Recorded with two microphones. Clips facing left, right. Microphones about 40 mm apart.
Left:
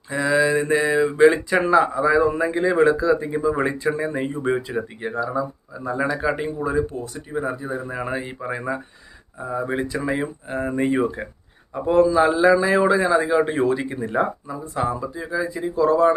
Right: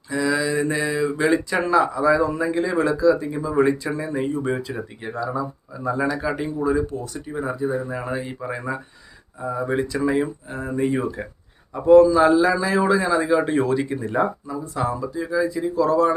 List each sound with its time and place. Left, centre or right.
0.1 s mantra: left
1.6 s a man's voice: left
3.5 s a man's voice: centre
3.9 s a man's voice: left
6.1 s a man's voice: left
10.5 s a man's voice: left
11.7 s a man's voice: centre